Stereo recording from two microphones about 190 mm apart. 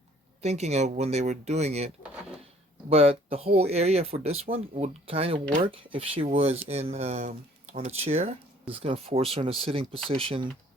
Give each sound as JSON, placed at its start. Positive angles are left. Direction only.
{"t": 0.4, "sound": "speech", "side_deg": -35}
{"t": 2.9, "sound": "speech", "side_deg": -30}